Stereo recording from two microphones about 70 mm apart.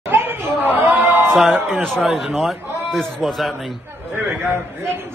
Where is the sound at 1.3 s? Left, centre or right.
Centre.